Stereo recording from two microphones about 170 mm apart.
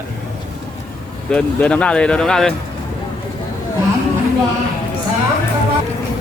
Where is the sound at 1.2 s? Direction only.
5° left (ahead or behind).